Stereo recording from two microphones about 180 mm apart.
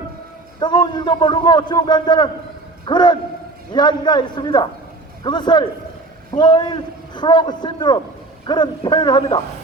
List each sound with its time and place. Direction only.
0.6 s a man's voice: 25° left (ahead or behind)